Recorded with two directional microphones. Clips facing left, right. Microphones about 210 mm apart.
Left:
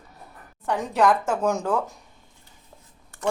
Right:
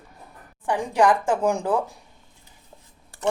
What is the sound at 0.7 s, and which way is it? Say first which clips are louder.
Speech: right 1 dB; 15° right (ahead or behind).